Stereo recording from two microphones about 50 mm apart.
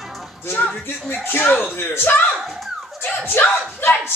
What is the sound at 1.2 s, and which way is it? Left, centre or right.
Speech, left.